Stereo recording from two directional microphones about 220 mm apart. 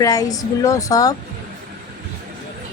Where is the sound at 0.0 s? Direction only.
15° left (ahead or behind).